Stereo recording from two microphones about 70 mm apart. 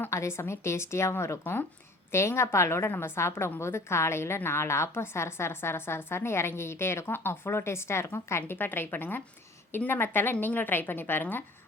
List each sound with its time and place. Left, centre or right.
0.1 s a woman's voice: left